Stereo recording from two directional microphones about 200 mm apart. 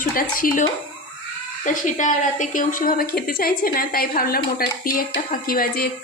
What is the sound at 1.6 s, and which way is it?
A woman's voice, 40° left (ahead or behind).